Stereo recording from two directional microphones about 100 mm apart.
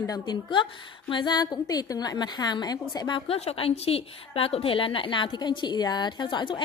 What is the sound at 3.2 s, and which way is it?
A woman's voice, 80° left.